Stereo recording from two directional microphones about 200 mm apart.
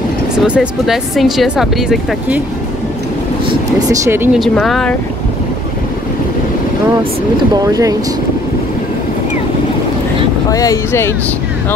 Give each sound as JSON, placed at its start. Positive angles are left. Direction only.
{"t": 0.4, "sound": "speech", "side_deg": 0}
{"t": 4.0, "sound": "speech", "side_deg": -10}
{"t": 7.6, "sound": "speech", "side_deg": -15}
{"t": 10.5, "sound": "speech", "side_deg": 15}